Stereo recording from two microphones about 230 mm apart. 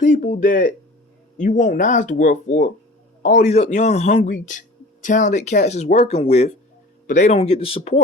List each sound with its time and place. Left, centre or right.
0.0 s speech: left